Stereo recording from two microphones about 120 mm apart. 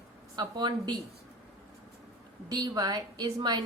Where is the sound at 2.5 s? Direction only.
35° right (ahead or behind).